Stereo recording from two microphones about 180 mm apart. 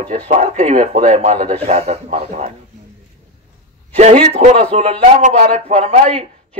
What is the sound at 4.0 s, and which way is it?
Speech, 40° right (ahead or behind).